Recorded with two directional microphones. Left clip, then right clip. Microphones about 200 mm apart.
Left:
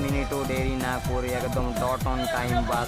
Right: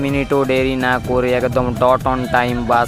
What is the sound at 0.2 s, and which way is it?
Speech, 45° right (ahead or behind).